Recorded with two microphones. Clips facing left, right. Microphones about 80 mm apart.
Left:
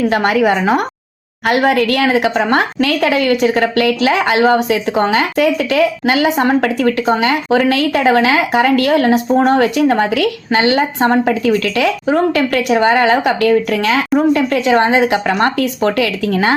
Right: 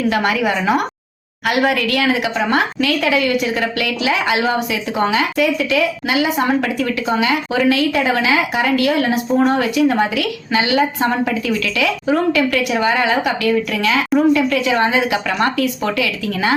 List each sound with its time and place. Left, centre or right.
0.1 s a woman's voice: left